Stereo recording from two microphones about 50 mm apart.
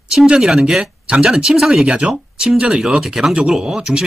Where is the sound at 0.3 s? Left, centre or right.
Centre.